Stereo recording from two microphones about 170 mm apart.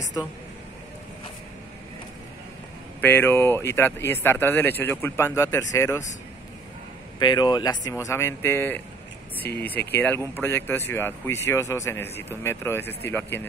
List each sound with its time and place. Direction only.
3.0 s speech: 10° left (ahead or behind)
7.2 s speech: 25° left (ahead or behind)